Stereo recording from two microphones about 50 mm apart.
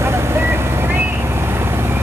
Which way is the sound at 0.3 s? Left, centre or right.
Right.